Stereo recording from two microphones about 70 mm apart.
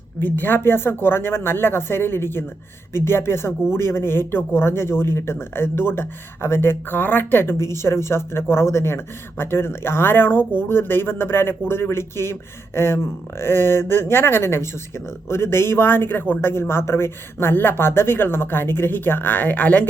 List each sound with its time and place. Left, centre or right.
0.2 s speech: left